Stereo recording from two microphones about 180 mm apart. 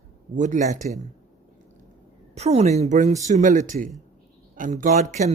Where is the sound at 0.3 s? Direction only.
45° right (ahead or behind).